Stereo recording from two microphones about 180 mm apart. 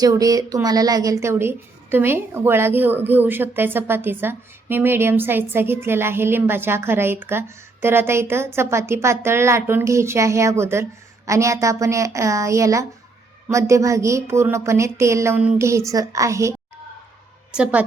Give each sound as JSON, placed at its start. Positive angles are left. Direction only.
{"t": 0.0, "sound": "a woman's voice", "side_deg": -20}
{"t": 17.5, "sound": "a woman's voice", "side_deg": -5}